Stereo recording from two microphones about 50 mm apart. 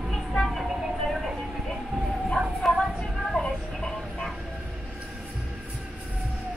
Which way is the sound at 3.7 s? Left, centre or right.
Centre.